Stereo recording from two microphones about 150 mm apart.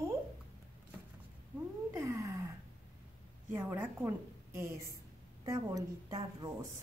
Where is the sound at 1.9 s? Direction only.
20° right (ahead or behind).